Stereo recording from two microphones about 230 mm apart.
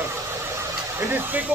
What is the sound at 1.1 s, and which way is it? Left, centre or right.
Speech, centre.